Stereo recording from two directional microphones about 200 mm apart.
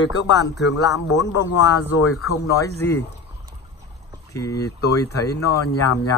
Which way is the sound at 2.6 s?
10° left (ahead or behind).